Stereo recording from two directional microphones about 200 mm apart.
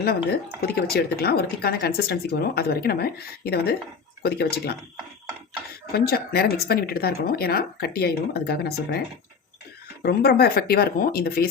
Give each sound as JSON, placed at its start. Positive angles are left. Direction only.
{"t": 0.0, "sound": "speech", "side_deg": 55}
{"t": 5.9, "sound": "speech", "side_deg": 50}
{"t": 10.0, "sound": "speech", "side_deg": 50}